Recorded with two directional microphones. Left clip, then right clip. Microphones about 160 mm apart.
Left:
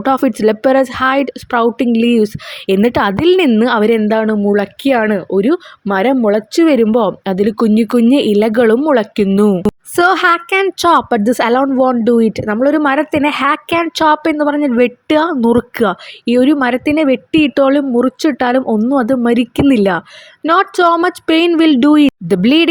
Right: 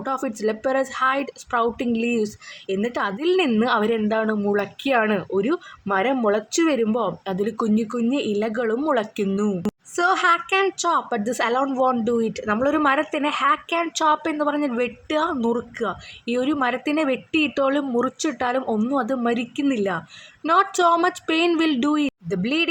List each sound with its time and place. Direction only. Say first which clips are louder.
0.0 s speech: left 12 dB; 45° left (ahead or behind)
2.6 s a woman's voice: left 12 dB; 55° left (ahead or behind); by 9.3 s 40° left (ahead or behind)
9.3 s a woman's voice: left 12 dB; 55° left (ahead or behind)
20.5 s a woman's voice: left 7 dB; 35° left (ahead or behind)